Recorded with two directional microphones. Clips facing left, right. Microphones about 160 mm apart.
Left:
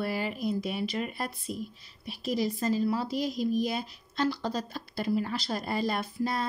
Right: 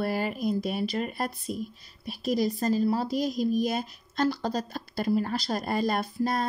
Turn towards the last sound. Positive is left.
turn(degrees=-45)  # may be behind; listen again after turning